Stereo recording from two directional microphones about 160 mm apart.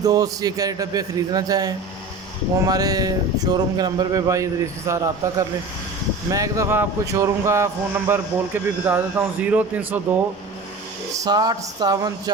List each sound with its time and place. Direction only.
0.0 s a man's voice: 25° right (ahead or behind)
11.1 s a man's voice: 25° right (ahead or behind)